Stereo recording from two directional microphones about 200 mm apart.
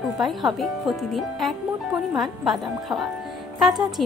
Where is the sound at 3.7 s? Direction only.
20° right (ahead or behind).